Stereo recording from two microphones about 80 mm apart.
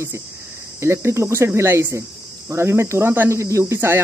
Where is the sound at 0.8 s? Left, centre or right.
Right.